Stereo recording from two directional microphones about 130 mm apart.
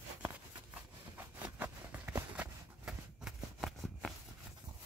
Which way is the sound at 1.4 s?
15° right (ahead or behind).